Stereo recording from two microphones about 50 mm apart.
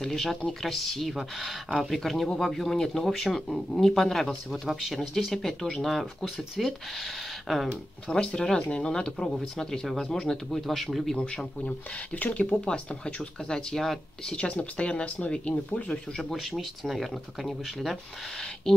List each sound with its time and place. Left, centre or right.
0.0 s speech: centre
3.4 s speech: centre
7.7 s speech: centre
11.1 s speech: centre
11.6 s speech: left
12.6 s speech: left
14.4 s speech: left
16.2 s speech: centre